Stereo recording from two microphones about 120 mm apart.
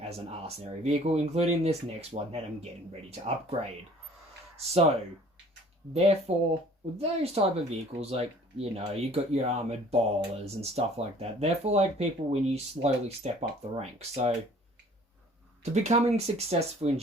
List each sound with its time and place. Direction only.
0.0 s speech: 60° right (ahead or behind)
4.5 s speech: 60° right (ahead or behind)
15.7 s speech: 70° right (ahead or behind)